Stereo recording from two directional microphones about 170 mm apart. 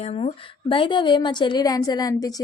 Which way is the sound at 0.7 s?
30° left (ahead or behind).